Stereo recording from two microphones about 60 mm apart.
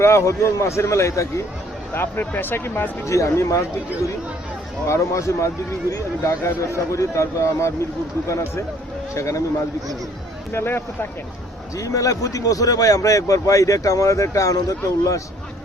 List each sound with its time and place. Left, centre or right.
0.0 s speech: left
1.9 s speech: left
3.1 s speech: left
4.9 s speech: left
9.1 s speech: left
10.5 s speech: left
11.8 s a man's voice: left